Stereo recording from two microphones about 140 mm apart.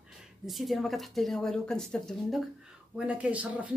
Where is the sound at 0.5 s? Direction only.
Centre (ahead or behind).